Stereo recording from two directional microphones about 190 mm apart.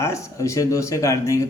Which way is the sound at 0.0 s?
15° left (ahead or behind).